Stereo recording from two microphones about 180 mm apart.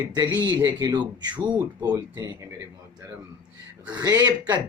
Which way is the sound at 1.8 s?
15° right (ahead or behind).